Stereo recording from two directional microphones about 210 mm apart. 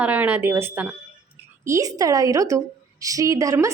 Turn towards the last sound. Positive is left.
turn(degrees=-15)  # may be behind; listen again after turning